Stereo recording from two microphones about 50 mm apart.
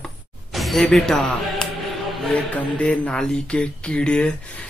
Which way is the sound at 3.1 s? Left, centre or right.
Centre.